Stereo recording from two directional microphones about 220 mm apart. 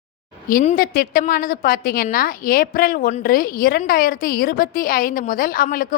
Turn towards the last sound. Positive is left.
turn(degrees=40)  # may be behind; listen again after turning